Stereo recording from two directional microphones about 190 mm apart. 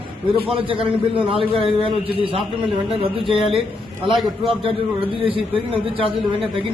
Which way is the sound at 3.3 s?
25° right (ahead or behind).